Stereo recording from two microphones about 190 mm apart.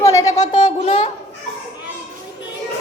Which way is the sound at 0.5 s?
25° left (ahead or behind).